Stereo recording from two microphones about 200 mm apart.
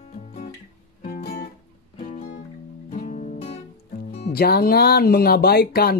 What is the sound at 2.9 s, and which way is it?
Music, 35° left (ahead or behind).